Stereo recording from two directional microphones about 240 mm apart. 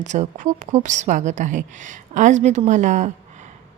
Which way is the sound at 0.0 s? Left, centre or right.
Right.